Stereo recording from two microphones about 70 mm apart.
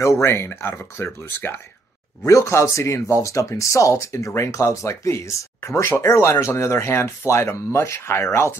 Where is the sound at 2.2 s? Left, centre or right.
Left.